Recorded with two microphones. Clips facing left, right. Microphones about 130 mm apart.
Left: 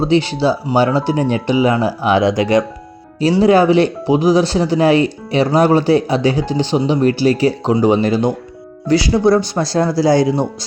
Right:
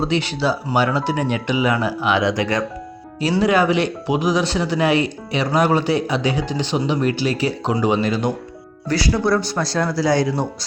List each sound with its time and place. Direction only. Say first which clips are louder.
0.0 s speech: left 6 dB; 30° left (ahead or behind)